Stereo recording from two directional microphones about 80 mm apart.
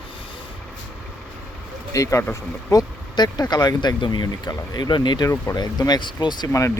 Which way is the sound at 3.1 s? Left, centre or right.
Left.